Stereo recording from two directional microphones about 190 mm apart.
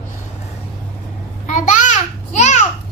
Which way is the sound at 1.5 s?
40° left (ahead or behind).